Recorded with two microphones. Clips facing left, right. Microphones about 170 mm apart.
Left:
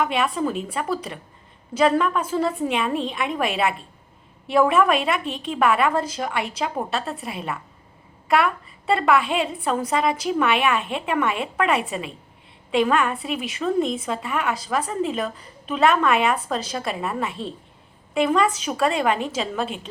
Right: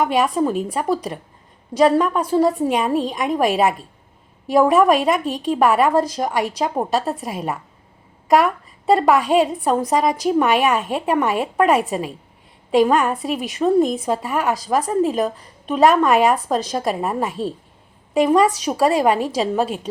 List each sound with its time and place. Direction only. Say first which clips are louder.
0.0 s a woman's voice: right 5 dB; 40° right (ahead or behind)